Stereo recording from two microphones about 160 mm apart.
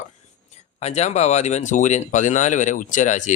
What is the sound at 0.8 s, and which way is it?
Speech, 45° left (ahead or behind).